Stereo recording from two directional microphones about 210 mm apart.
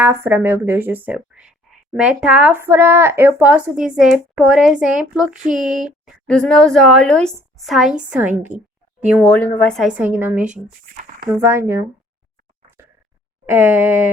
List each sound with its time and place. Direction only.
0.0 s a woman's voice: 10° right (ahead or behind)
9.3 s a woman's voice: 10° left (ahead or behind); by 11.9 s 10° right (ahead or behind)
13.5 s speech: 10° right (ahead or behind)